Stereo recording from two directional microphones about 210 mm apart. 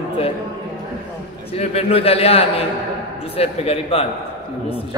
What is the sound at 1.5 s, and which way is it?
A man's voice, 30° left (ahead or behind).